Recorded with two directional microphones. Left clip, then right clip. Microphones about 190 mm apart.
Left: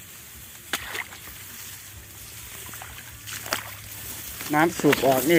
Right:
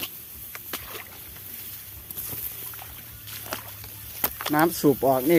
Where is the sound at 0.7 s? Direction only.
25° left (ahead or behind).